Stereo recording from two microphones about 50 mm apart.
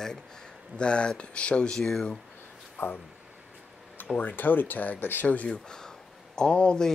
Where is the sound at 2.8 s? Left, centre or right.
Left.